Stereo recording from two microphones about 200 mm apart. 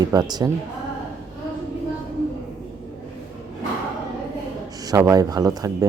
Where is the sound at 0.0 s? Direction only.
20° right (ahead or behind).